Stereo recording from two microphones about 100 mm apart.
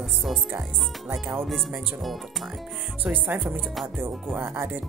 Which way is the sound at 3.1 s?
20° right (ahead or behind).